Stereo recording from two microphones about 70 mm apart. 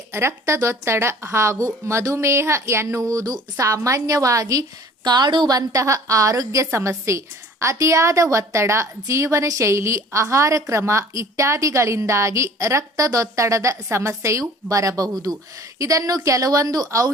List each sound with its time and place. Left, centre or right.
0.1 s a woman's voice: right
5.0 s a woman's voice: right